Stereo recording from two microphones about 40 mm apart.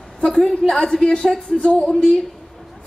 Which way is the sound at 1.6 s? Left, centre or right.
Left.